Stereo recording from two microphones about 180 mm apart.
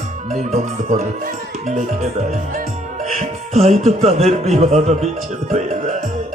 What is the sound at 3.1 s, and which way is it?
Speech, 35° right (ahead or behind).